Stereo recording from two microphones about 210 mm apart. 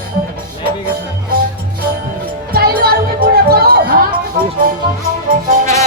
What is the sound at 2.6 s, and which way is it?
Music, 45° right (ahead or behind).